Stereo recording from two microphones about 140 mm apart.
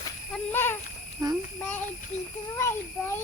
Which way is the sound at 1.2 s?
25° right (ahead or behind).